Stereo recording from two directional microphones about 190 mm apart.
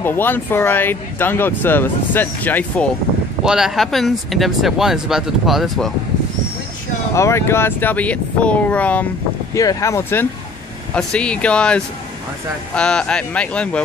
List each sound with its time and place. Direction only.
0.0 s speech: 10° left (ahead or behind)
3.4 s speech: centre (ahead or behind)
7.2 s speech: 15° left (ahead or behind)